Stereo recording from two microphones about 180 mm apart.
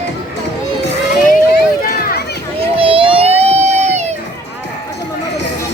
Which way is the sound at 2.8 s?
30° right (ahead or behind).